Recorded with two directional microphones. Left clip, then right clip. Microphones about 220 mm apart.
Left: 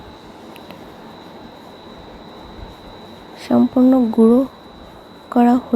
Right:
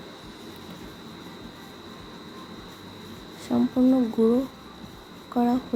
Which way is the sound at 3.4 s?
30° left (ahead or behind).